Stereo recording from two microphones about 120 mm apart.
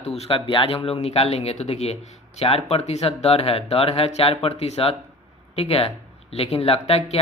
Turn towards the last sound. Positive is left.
turn(degrees=60)  # may be behind; listen again after turning